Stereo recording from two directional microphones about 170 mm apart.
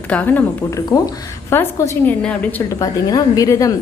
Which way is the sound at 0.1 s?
10° left (ahead or behind).